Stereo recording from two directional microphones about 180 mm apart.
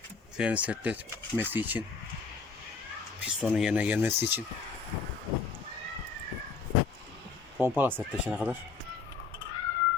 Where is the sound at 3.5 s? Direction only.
5° right (ahead or behind).